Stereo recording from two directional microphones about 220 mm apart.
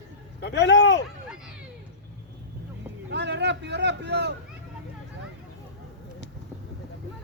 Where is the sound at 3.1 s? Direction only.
50° right (ahead or behind).